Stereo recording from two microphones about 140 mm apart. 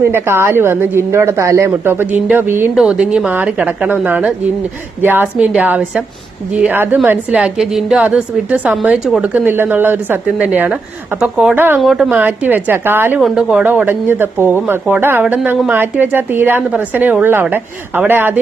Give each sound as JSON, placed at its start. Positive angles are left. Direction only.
{"t": 0.0, "sound": "speech", "side_deg": -15}
{"t": 11.8, "sound": "speech", "side_deg": 0}